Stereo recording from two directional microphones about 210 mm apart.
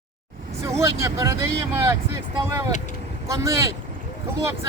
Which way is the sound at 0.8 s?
15° right (ahead or behind).